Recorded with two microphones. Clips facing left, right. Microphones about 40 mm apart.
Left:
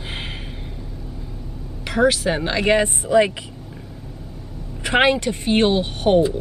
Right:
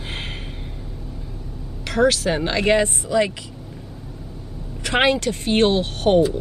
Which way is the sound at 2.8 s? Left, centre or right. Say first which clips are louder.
Left 3 dB; left.